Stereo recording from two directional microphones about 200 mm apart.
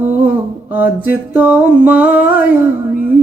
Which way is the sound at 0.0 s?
10° right (ahead or behind).